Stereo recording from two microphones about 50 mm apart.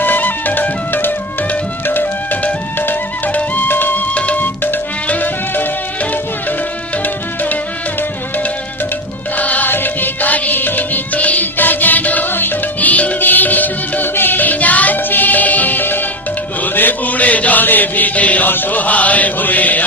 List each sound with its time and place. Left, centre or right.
0.0 s music: left
9.4 s music: left
12.9 s music: left